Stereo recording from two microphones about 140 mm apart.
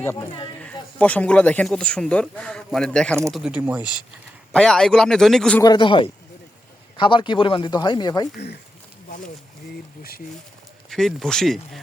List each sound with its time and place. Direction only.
0.6 s speech: 10° left (ahead or behind)
3.3 s speech: 5° right (ahead or behind)
4.5 s speech: 5° left (ahead or behind)
5.6 s speech: 35° left (ahead or behind)
10.0 s speech: 90° left
10.8 s speech: 5° left (ahead or behind)